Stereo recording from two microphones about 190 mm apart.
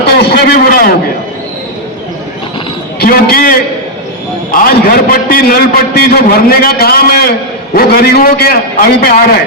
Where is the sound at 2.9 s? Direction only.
50° left (ahead or behind).